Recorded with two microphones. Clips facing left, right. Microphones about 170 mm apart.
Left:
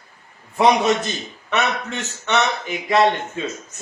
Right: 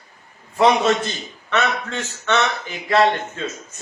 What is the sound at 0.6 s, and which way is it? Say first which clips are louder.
Speech: even; 15° left (ahead or behind).